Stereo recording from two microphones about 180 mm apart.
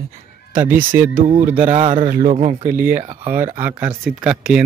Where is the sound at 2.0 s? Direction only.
45° right (ahead or behind).